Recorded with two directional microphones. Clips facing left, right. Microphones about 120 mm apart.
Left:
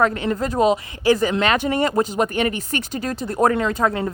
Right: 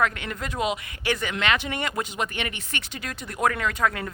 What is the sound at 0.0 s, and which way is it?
Speech, 35° left (ahead or behind).